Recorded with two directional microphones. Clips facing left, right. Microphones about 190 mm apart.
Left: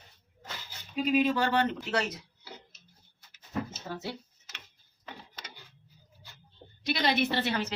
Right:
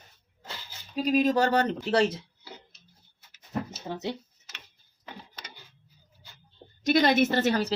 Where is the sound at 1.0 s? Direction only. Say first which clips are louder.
Right 3 dB; 40° right (ahead or behind).